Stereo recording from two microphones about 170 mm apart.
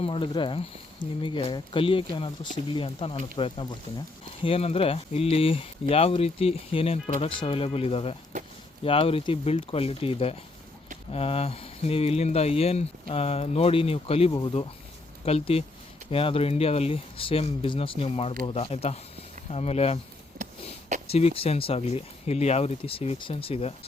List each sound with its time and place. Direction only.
0.0 s speech: 30° left (ahead or behind)
20.4 s a sound: 45° right (ahead or behind)
21.1 s speech: 35° left (ahead or behind)